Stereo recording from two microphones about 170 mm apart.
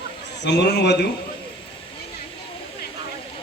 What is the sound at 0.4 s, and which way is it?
Speech, 90° left.